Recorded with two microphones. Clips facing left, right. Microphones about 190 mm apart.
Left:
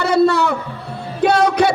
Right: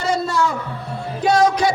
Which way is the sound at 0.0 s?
65° left (ahead or behind).